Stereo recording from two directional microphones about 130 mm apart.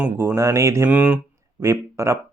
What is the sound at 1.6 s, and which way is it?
Speech, 25° right (ahead or behind).